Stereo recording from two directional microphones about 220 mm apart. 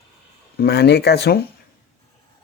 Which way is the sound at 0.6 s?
45° left (ahead or behind).